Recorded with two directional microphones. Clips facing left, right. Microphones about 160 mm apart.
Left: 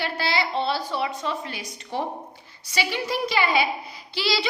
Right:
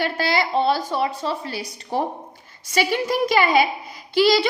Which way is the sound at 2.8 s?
45° right (ahead or behind).